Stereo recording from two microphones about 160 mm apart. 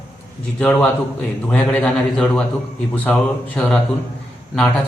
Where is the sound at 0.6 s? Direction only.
10° left (ahead or behind).